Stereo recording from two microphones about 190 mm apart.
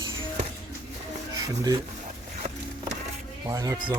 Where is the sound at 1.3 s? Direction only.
20° right (ahead or behind).